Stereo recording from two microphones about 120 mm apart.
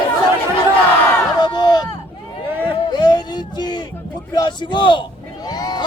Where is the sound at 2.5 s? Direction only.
20° right (ahead or behind).